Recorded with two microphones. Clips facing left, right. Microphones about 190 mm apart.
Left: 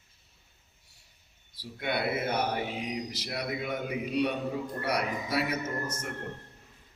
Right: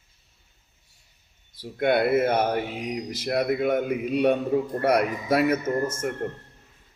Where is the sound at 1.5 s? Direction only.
50° right (ahead or behind).